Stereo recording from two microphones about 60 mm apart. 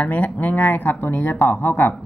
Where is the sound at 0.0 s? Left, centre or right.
Left.